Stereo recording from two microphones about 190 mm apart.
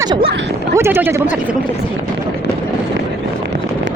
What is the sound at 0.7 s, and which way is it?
Speech, 10° right (ahead or behind).